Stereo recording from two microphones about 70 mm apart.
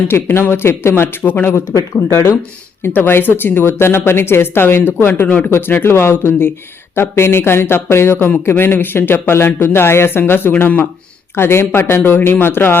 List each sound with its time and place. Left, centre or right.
0.1 s speech: left
1.7 s speech: left
2.8 s speech: left